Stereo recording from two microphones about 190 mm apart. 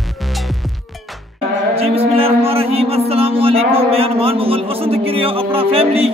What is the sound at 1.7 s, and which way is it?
Music, 30° right (ahead or behind).